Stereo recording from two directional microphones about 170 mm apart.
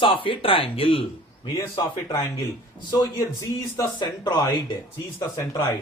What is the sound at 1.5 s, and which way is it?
Speech, 20° left (ahead or behind).